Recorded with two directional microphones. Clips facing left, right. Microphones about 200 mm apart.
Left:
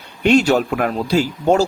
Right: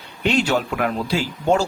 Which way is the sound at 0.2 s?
45° left (ahead or behind).